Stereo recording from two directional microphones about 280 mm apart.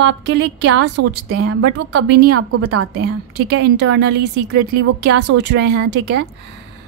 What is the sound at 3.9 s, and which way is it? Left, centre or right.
A woman's voice, right.